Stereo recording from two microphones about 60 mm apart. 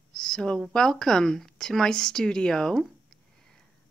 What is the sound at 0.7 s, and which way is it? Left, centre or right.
Speech, centre.